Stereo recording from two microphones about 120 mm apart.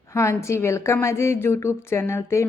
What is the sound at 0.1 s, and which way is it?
A woman's voice, 25° left (ahead or behind).